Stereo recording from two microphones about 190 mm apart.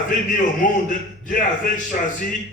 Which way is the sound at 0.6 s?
45° left (ahead or behind).